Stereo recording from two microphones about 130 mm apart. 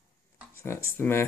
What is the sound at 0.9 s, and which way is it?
Speech, 15° left (ahead or behind).